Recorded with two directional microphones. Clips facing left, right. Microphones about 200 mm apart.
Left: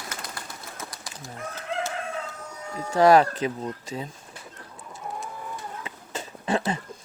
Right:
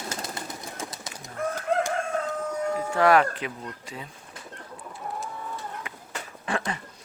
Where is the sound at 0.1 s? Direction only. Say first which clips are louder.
Right 4 dB; 25° right (ahead or behind).